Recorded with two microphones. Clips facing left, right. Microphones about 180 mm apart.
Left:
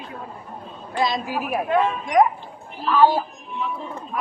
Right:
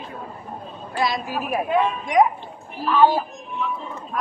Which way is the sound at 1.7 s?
5° right (ahead or behind).